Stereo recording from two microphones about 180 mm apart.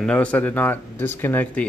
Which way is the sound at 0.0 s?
5° left (ahead or behind).